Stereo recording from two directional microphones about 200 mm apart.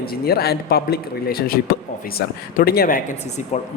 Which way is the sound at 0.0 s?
50° left (ahead or behind).